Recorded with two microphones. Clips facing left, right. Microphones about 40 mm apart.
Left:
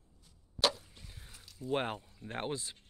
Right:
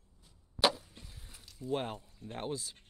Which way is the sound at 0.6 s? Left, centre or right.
Centre.